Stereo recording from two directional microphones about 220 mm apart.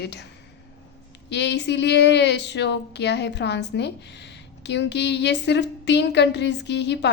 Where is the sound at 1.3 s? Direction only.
50° left (ahead or behind).